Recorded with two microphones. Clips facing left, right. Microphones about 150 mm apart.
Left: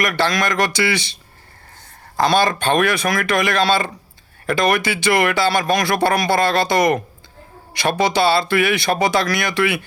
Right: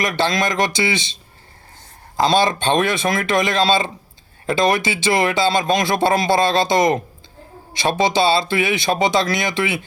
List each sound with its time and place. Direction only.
0.0 s speech: 20° right (ahead or behind)